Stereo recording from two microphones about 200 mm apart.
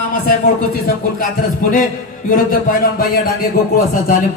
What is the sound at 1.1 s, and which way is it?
A man's voice, 45° left (ahead or behind).